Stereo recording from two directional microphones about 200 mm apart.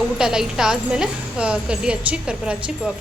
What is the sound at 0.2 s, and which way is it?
A woman's voice, 5° right (ahead or behind).